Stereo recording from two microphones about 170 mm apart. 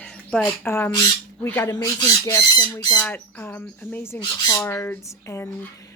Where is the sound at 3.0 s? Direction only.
10° left (ahead or behind).